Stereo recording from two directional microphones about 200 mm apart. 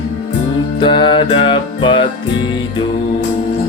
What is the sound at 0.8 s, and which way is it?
Music, 25° left (ahead or behind).